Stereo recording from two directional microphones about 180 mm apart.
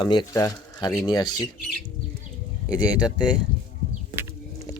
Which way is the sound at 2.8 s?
20° left (ahead or behind).